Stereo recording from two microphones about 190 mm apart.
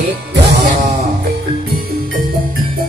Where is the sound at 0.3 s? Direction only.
65° right (ahead or behind).